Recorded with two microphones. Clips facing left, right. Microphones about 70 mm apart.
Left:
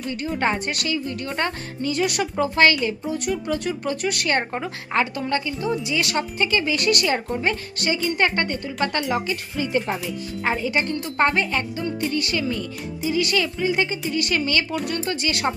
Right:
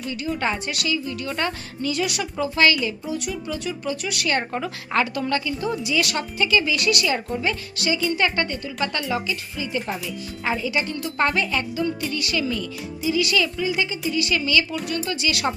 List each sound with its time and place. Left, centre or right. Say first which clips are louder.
0.1 s speech: left 2 dB; left
3.4 s speech: left 3 dB; left
4.5 s speech: even; left
10.4 s speech: left 1 dB; left
11.0 s speech: left 1 dB; left